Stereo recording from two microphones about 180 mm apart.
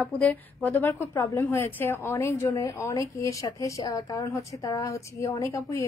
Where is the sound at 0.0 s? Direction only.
5° left (ahead or behind).